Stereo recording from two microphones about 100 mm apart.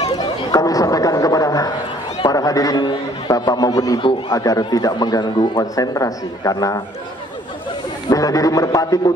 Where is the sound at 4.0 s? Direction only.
55° left (ahead or behind).